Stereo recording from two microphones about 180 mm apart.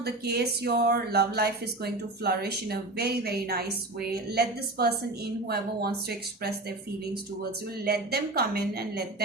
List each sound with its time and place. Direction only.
0.0 s speech: 65° right (ahead or behind)
7.9 s speech: 60° right (ahead or behind)